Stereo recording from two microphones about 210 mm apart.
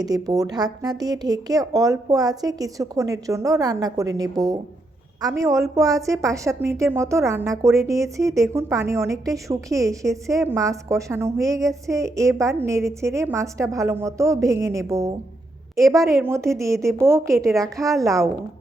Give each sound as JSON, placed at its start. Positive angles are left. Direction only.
{"t": 0.0, "sound": "a woman's voice", "side_deg": -20}